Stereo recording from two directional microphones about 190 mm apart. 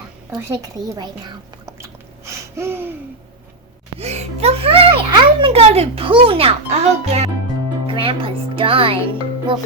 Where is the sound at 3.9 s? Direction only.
35° right (ahead or behind).